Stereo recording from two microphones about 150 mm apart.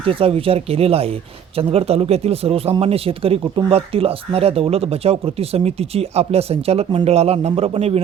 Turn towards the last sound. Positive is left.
turn(degrees=-45)  # may be behind; listen again after turning